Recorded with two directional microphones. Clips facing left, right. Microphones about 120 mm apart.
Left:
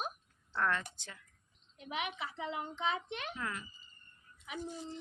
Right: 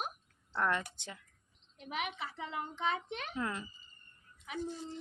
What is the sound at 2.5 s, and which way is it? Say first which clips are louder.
Child singing: right 1 dB; 45° right (ahead or behind).